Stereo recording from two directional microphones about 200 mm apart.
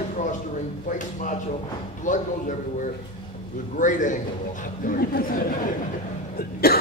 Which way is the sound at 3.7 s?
40° left (ahead or behind).